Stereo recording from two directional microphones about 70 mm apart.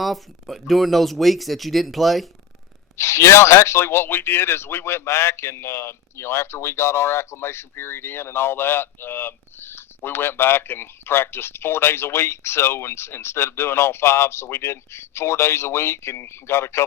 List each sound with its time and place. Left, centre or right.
0.0 s speech: centre
3.0 s speech: left